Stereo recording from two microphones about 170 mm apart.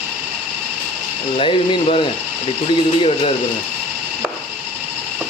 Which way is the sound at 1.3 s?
35° left (ahead or behind).